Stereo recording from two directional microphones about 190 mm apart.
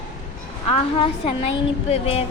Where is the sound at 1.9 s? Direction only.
30° left (ahead or behind).